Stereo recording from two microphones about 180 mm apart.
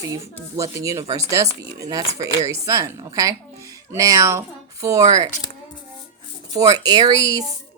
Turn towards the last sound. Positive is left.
turn(degrees=-20)  # may be behind; listen again after turning